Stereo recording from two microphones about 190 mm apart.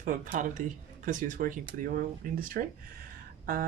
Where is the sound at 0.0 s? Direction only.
50° right (ahead or behind).